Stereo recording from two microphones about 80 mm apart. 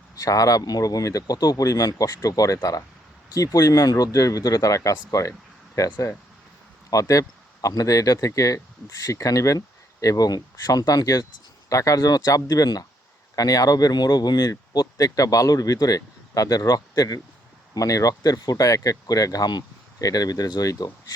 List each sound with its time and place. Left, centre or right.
0.2 s speech: left
14.3 s speech: left